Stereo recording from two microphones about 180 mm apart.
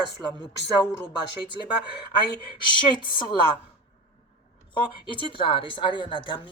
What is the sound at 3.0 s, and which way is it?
Speech, 25° left (ahead or behind).